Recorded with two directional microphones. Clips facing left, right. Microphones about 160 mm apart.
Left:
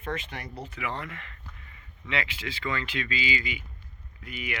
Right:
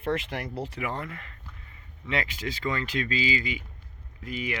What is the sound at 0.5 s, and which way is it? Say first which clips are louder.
Speech: right 6 dB; 90° right.